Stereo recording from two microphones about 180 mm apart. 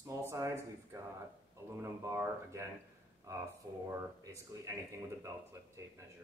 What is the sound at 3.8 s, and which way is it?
Speech, 15° right (ahead or behind).